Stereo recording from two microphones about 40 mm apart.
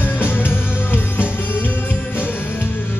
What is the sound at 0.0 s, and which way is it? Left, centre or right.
Music, left.